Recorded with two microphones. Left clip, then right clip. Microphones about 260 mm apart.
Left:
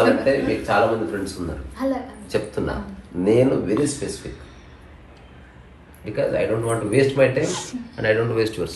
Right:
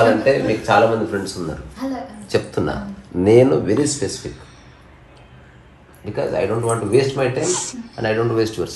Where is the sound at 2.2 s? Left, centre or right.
Right.